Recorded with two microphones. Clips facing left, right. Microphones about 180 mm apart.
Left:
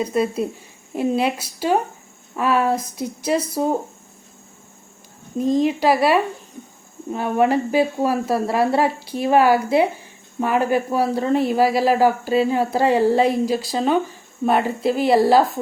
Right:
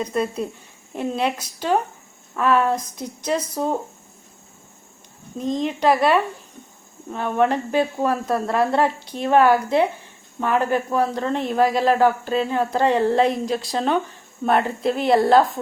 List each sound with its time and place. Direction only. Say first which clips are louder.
0.0 s speech: left 3 dB; 5° left (ahead or behind)
5.4 s a woman's voice: left 4 dB; 5° left (ahead or behind)